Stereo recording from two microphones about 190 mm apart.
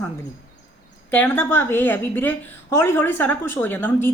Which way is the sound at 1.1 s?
10° left (ahead or behind).